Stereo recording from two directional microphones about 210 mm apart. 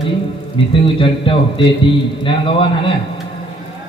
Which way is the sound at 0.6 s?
25° left (ahead or behind).